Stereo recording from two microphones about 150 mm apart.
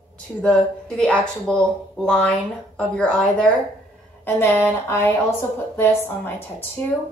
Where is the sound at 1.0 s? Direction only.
5° left (ahead or behind).